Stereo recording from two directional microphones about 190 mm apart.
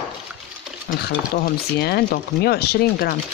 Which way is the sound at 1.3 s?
55° left (ahead or behind).